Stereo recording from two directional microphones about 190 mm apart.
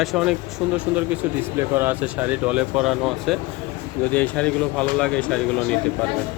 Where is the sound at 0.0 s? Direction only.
Centre (ahead or behind).